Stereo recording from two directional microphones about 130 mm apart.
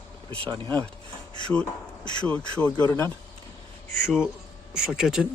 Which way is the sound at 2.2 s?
10° left (ahead or behind).